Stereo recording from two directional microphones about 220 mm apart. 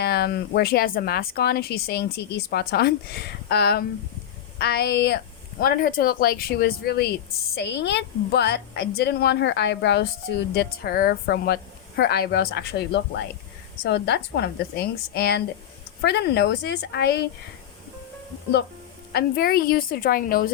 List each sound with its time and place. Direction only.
0.0 s a woman's voice: 45° left (ahead or behind)
19.1 s a woman's voice: 45° left (ahead or behind)